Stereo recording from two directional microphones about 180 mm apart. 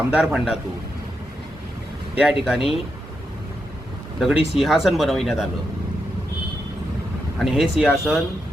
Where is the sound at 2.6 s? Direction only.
30° left (ahead or behind).